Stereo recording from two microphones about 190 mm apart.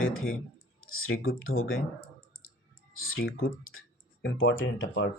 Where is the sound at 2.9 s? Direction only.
90° left.